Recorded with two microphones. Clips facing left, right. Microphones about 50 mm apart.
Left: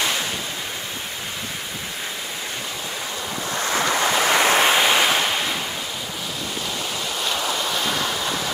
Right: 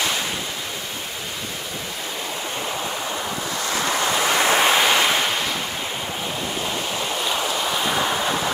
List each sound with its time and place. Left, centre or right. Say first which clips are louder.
3.8 s waves: left 1 dB; centre
7.8 s waves: right 3 dB; centre